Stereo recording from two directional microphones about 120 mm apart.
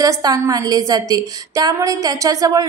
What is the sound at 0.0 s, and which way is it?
A woman's voice, 30° right (ahead or behind).